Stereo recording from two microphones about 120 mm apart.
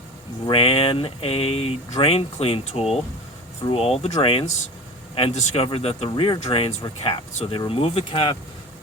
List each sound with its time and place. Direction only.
0.4 s speech: 50° left (ahead or behind)